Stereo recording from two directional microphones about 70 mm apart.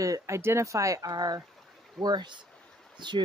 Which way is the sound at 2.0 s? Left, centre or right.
Right.